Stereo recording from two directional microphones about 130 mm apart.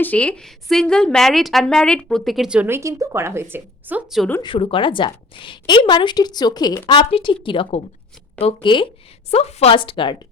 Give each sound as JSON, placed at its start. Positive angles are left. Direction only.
{"t": 0.0, "sound": "a woman's voice", "side_deg": 10}
{"t": 2.6, "sound": "a woman's voice", "side_deg": -20}
{"t": 4.4, "sound": "a woman's voice", "side_deg": 40}
{"t": 9.3, "sound": "speech", "side_deg": 55}